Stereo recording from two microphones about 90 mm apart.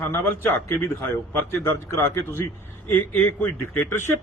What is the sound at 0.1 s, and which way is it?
A man's voice, 25° left (ahead or behind).